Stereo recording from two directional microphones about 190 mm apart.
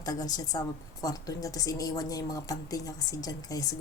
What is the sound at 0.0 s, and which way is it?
A woman's voice, 20° left (ahead or behind).